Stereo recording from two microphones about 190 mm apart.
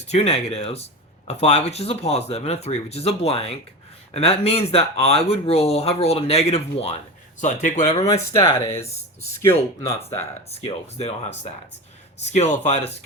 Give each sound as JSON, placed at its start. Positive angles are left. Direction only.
{"t": 0.1, "sound": "speech", "side_deg": 30}
{"t": 8.4, "sound": "speech", "side_deg": 15}
{"t": 10.0, "sound": "speech", "side_deg": 35}